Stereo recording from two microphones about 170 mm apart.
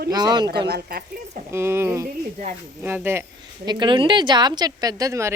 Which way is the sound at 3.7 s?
25° right (ahead or behind).